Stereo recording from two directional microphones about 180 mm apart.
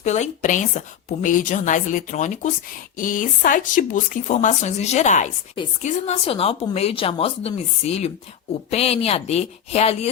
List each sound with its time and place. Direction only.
0.0 s a woman's voice: 40° left (ahead or behind)